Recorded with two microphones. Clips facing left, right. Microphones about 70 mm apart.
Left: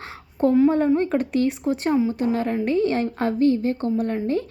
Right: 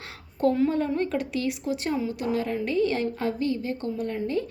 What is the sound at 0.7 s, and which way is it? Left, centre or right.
A woman's voice, left.